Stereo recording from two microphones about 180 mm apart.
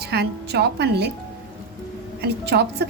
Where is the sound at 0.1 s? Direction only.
65° right (ahead or behind).